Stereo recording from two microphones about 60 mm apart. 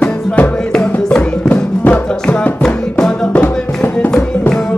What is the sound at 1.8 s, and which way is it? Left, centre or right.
Music, left.